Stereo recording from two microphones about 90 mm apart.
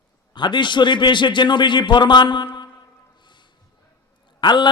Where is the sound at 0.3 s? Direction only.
60° left (ahead or behind).